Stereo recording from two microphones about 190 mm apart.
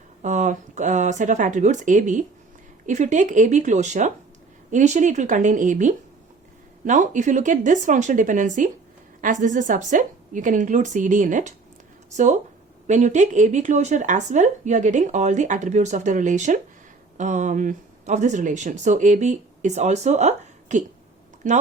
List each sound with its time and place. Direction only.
0.2 s speech: 40° right (ahead or behind)